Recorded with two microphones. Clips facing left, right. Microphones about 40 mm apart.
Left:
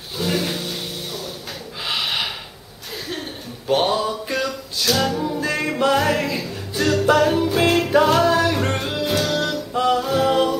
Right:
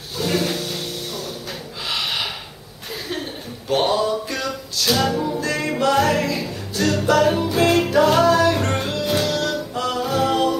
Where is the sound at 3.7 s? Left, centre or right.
Centre.